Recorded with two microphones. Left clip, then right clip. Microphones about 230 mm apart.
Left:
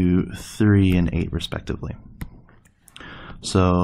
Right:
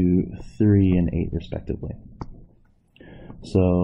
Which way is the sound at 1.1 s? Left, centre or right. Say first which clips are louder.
Left 1 dB; left.